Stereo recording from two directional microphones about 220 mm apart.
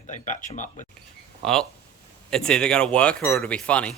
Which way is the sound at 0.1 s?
35° left (ahead or behind).